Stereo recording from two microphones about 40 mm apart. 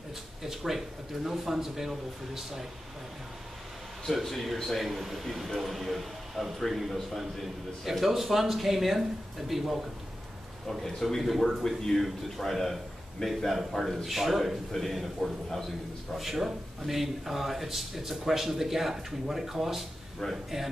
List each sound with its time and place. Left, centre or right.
0.4 s speech: centre
4.0 s a man's voice: centre
4.8 s speech: centre
10.9 s a man's voice: centre
11.1 s speech: centre
13.2 s a man's voice: centre
13.8 s speech: centre
20.2 s a man's voice: centre